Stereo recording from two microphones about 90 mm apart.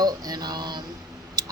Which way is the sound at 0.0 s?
50° right (ahead or behind).